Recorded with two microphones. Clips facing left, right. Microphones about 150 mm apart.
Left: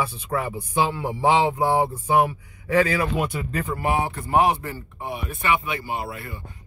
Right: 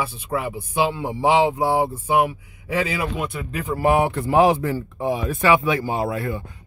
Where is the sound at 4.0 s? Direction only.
80° right.